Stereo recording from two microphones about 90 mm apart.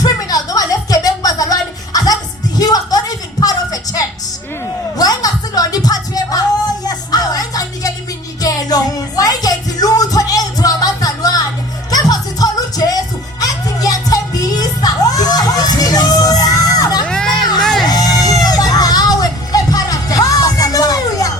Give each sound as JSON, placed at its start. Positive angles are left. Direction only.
{"t": 0.0, "sound": "a sound", "side_deg": 45}
{"t": 2.6, "sound": "music", "side_deg": 45}
{"t": 17.1, "sound": "crowd", "side_deg": 5}
{"t": 17.6, "sound": "music", "side_deg": 0}
{"t": 17.8, "sound": "music", "side_deg": 45}